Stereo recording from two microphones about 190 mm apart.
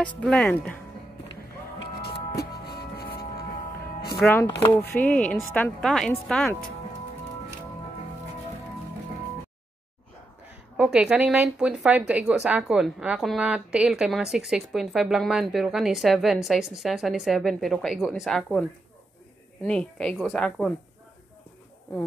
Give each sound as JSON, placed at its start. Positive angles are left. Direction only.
{"t": 0.0, "sound": "speech", "side_deg": 5}
{"t": 3.0, "sound": "a sound", "side_deg": 55}
{"t": 4.2, "sound": "speech", "side_deg": 10}
{"t": 10.8, "sound": "speech", "side_deg": -5}